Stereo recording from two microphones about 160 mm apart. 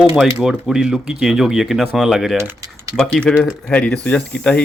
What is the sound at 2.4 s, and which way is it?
Typing, 20° right (ahead or behind).